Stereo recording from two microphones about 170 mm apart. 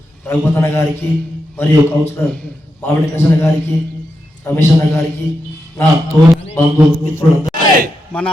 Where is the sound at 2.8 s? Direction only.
15° left (ahead or behind).